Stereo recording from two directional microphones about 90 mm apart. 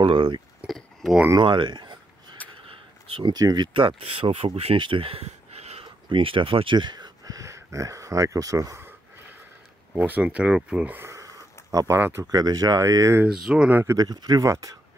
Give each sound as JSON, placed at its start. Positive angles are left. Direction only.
{"t": 0.0, "sound": "speech", "side_deg": -60}
{"t": 0.7, "sound": "a sound", "side_deg": 0}
{"t": 1.4, "sound": "a sound", "side_deg": -60}
{"t": 3.3, "sound": "speech", "side_deg": -50}
{"t": 9.9, "sound": "speech", "side_deg": -20}
{"t": 11.0, "sound": "a sound", "side_deg": -35}
{"t": 12.0, "sound": "speech", "side_deg": -30}
{"t": 12.3, "sound": "speech", "side_deg": -45}
{"t": 13.3, "sound": "speech", "side_deg": -5}
{"t": 13.7, "sound": "speech", "side_deg": -20}
{"t": 13.9, "sound": "speech", "side_deg": -50}
{"t": 14.4, "sound": "speech", "side_deg": -35}